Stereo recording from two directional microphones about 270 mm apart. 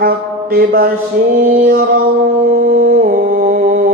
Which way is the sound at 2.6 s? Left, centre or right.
Right.